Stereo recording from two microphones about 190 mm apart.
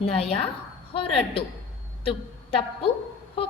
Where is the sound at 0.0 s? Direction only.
30° left (ahead or behind).